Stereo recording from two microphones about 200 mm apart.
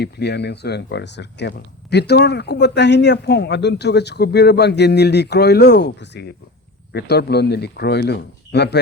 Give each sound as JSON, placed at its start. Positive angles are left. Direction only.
{"t": 0.0, "sound": "speech", "side_deg": 55}